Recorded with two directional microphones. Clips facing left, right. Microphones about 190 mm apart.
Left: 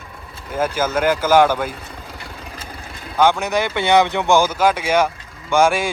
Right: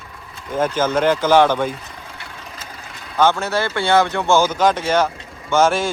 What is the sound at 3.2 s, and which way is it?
Speech, 15° left (ahead or behind).